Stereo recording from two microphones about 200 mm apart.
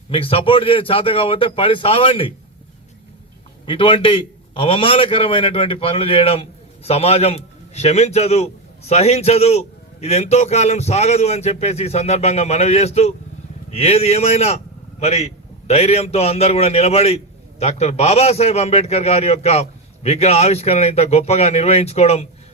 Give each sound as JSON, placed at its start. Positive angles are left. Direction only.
{"t": 0.1, "sound": "a man's voice", "side_deg": 25}
{"t": 3.7, "sound": "a man's voice", "side_deg": 25}